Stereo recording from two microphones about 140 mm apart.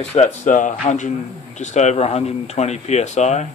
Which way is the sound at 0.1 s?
55° left (ahead or behind).